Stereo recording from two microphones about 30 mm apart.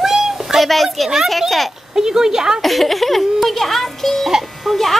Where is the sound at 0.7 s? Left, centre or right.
Centre.